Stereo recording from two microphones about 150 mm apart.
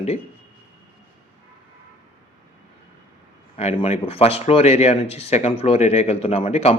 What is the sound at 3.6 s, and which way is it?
Speech, 40° left (ahead or behind).